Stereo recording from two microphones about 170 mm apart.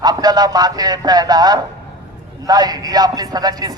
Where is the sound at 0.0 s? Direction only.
25° right (ahead or behind).